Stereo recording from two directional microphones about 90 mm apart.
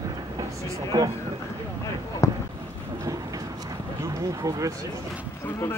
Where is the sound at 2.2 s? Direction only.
35° left (ahead or behind).